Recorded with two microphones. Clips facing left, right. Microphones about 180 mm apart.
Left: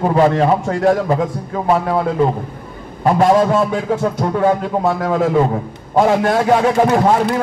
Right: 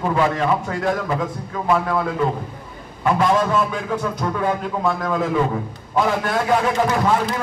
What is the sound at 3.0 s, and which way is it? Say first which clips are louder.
A man's voice: left 6 dB; 40° left (ahead or behind).